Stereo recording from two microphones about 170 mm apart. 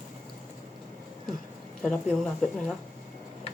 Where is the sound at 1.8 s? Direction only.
5° left (ahead or behind).